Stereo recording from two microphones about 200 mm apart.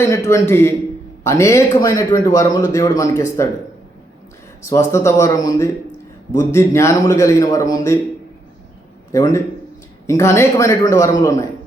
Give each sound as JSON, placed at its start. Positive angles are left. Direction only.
{"t": 0.0, "sound": "a man's voice", "side_deg": 15}
{"t": 4.6, "sound": "a man's voice", "side_deg": 15}
{"t": 9.1, "sound": "a man's voice", "side_deg": 15}